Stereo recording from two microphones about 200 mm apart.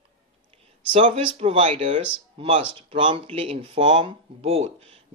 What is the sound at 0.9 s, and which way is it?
Speech, 25° right (ahead or behind).